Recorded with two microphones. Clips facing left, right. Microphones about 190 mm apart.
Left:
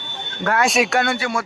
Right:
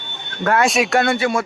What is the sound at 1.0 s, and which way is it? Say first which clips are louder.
Speech: right 4 dB; 25° right (ahead or behind).